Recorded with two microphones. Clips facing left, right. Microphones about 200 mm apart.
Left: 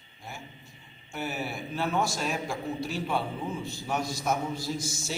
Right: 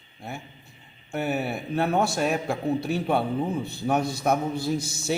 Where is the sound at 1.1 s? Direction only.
60° right (ahead or behind).